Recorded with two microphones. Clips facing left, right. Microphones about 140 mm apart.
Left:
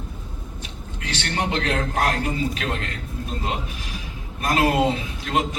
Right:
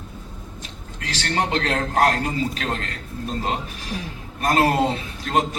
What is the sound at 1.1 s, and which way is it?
A man's voice, 40° right (ahead or behind).